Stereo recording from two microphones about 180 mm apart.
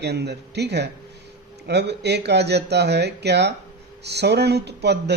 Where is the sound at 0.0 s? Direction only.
65° right (ahead or behind).